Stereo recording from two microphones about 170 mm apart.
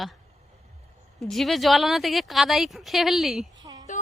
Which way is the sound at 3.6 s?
25° right (ahead or behind).